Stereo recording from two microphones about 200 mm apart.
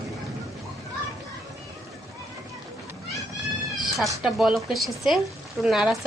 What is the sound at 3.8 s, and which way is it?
Cat, centre (ahead or behind).